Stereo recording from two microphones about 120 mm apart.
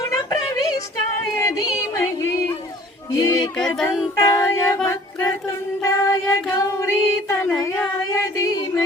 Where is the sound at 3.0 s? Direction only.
25° left (ahead or behind).